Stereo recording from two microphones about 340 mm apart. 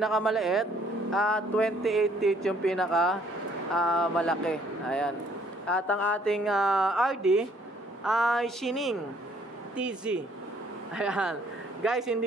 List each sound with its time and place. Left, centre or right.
0.0 s speech: centre